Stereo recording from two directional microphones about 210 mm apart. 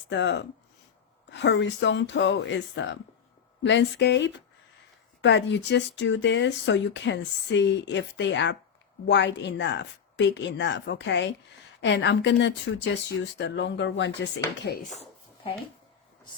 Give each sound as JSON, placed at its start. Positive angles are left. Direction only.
{"t": 0.1, "sound": "speech", "side_deg": 55}